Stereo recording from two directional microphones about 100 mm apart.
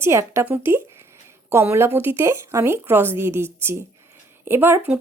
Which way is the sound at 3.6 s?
25° right (ahead or behind).